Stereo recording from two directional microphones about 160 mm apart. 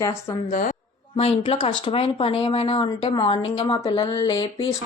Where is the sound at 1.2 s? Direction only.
35° left (ahead or behind).